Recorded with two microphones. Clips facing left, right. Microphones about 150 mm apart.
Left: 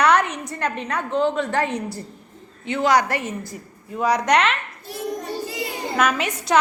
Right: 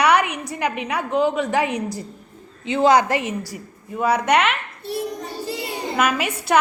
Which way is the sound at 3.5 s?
5° right (ahead or behind).